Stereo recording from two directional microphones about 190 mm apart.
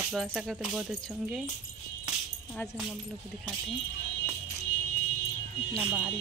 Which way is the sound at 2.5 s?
15° left (ahead or behind).